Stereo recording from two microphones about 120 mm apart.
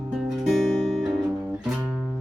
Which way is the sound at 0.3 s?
5° right (ahead or behind).